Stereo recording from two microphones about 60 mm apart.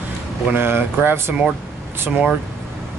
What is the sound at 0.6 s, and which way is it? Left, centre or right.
Speech, right.